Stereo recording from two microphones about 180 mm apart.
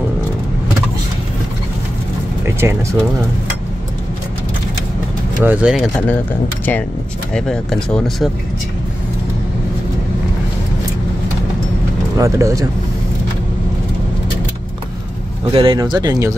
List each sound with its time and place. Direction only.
2.4 s speech: 15° right (ahead or behind)
5.4 s speech: 10° right (ahead or behind)
7.3 s speech: 5° left (ahead or behind)
12.2 s speech: 15° right (ahead or behind)
15.5 s speech: 30° right (ahead or behind)